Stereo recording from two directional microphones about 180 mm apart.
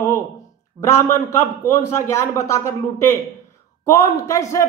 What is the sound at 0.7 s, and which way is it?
Speech, 15° left (ahead or behind).